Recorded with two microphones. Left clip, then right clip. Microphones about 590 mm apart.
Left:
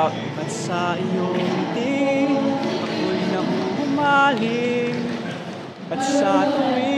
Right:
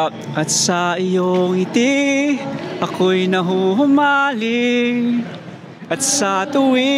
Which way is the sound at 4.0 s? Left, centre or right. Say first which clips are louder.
Right 2 dB; right.